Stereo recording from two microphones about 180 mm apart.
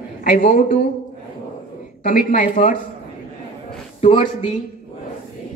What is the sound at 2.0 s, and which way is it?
Speech, 50° left (ahead or behind).